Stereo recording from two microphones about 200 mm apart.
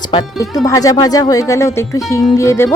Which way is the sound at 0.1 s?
20° left (ahead or behind).